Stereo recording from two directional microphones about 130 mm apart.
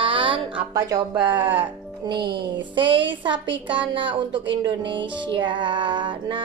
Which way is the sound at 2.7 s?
40° right (ahead or behind).